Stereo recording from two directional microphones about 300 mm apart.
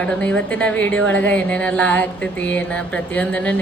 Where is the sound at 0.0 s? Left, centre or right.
Centre.